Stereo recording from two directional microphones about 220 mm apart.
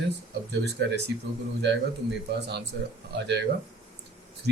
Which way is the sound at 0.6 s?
50° right (ahead or behind).